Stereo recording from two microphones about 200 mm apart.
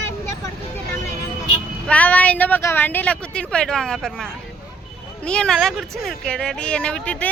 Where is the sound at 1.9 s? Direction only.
5° left (ahead or behind).